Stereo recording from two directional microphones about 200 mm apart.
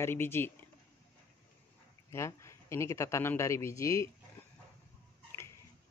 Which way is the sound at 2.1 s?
15° left (ahead or behind).